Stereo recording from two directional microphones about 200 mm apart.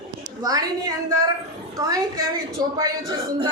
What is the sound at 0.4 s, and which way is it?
A woman's voice, 20° right (ahead or behind).